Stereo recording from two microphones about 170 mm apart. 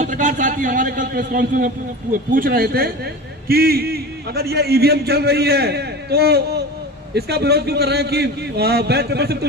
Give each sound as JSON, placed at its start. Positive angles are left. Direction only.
{"t": 0.0, "sound": "a man's voice", "side_deg": -45}